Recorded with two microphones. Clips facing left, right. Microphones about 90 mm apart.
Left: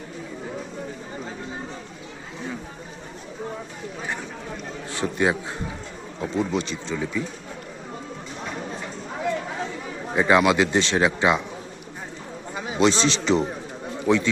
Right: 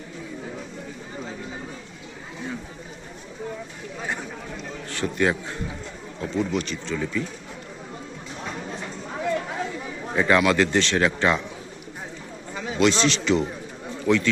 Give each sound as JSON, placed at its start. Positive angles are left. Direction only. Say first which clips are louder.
{"t": 4.9, "sound": "a man's voice", "louder": "even", "side_deg": 20}
{"t": 10.2, "sound": "a man's voice", "louder": "left 1 dB", "side_deg": 20}
{"t": 12.5, "sound": "a man's voice", "louder": "even", "side_deg": 20}